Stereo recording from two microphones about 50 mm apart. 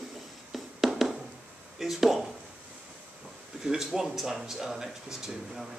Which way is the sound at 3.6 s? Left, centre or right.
Centre.